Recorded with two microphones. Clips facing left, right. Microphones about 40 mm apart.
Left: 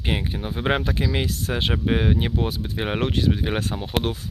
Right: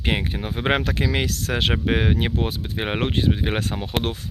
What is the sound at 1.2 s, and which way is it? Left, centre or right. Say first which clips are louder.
Speech: right 2 dB; right.